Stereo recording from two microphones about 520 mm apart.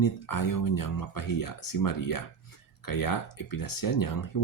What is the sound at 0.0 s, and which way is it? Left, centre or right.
Speech, left.